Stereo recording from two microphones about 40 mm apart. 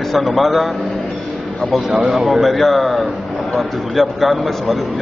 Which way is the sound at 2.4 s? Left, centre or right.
Centre.